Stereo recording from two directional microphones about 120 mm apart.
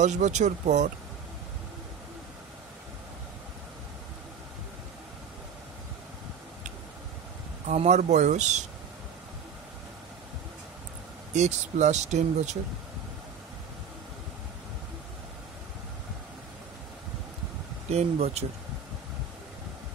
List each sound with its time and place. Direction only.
0.0 s speech: 80° right
7.6 s speech: 70° right (ahead or behind)
11.3 s speech: 75° right (ahead or behind)
17.8 s speech: 60° right (ahead or behind)